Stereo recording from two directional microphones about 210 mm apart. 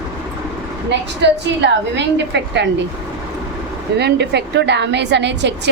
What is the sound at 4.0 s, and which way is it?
A woman's voice, 55° right (ahead or behind).